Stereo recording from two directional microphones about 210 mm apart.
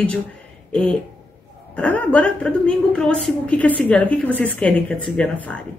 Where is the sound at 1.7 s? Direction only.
5° left (ahead or behind).